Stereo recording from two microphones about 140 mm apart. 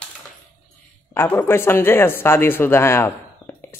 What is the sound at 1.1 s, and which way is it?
Speech, 15° left (ahead or behind).